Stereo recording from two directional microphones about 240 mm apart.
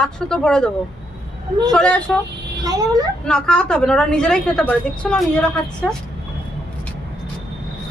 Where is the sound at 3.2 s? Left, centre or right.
Centre.